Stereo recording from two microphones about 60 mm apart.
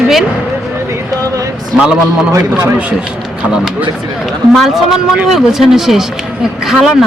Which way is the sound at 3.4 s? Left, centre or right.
Right.